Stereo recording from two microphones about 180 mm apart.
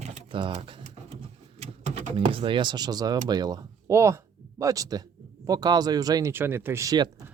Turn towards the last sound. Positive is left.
turn(degrees=-20)  # may be behind; listen again after turning